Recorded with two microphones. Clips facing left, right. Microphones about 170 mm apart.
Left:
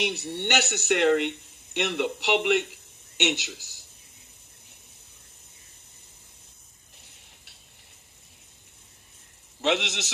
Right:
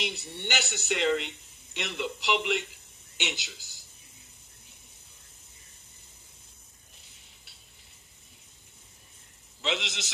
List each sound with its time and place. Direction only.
0.0 s speech: 70° left (ahead or behind)
9.6 s a man's voice: 70° left (ahead or behind)